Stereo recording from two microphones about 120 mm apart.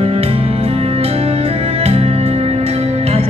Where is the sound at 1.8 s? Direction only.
60° right (ahead or behind).